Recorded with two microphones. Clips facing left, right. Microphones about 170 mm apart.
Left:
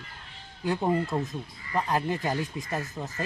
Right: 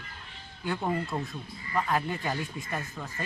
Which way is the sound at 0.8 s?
20° left (ahead or behind).